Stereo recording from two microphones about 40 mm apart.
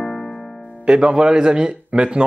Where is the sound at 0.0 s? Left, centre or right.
Centre.